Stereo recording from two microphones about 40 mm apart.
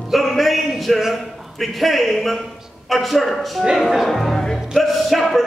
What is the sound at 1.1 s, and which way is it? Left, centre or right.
A man's voice, centre.